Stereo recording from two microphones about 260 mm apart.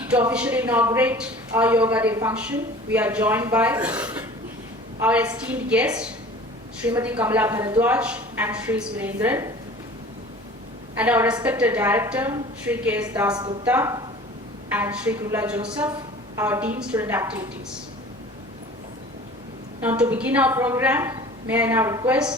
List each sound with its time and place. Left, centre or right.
0.1 s a woman's voice: centre
10.9 s a woman's voice: centre
19.8 s a woman's voice: centre